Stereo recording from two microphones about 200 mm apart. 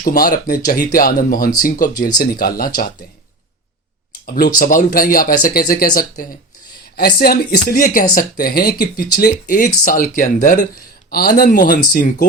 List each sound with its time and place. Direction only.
0.0 s speech: 45° left (ahead or behind)
4.3 s speech: 45° left (ahead or behind)